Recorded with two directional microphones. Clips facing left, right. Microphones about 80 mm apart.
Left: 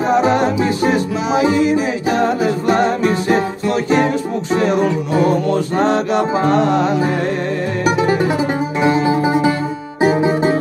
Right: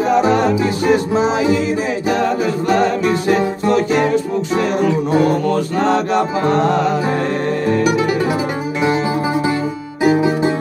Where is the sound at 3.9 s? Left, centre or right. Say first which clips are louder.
Even; left.